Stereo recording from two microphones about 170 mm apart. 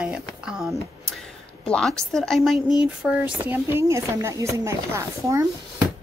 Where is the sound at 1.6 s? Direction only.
5° left (ahead or behind).